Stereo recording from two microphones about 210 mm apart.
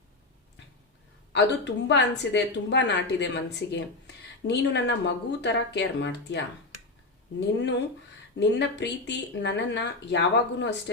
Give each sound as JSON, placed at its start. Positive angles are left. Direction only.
{"t": 1.3, "sound": "speech", "side_deg": 55}